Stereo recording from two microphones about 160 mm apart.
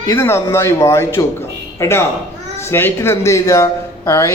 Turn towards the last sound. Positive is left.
turn(degrees=15)  # may be behind; listen again after turning